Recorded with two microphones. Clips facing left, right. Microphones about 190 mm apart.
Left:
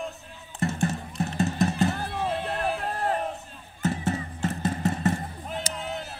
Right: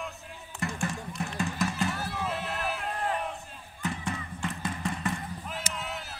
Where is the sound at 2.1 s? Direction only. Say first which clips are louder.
Left 5 dB; 30° left (ahead or behind).